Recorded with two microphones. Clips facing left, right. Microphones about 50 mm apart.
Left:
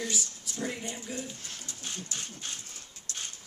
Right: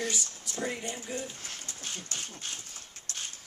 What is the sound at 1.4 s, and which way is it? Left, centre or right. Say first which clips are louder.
Pigeon: right 1 dB; right.